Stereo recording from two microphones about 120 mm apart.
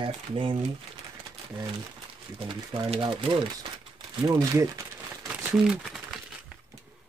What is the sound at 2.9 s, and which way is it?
Speech, 50° right (ahead or behind).